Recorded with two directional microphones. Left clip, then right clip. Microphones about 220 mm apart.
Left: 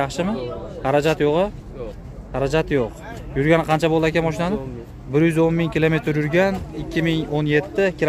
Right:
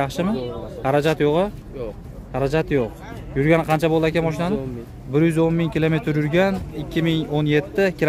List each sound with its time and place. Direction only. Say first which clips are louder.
0.0 s speech: even; 10° right (ahead or behind)